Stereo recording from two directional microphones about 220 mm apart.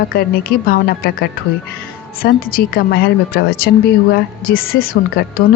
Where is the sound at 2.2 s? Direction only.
40° left (ahead or behind).